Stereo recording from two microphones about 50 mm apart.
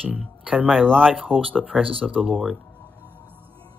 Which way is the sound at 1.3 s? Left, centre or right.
Right.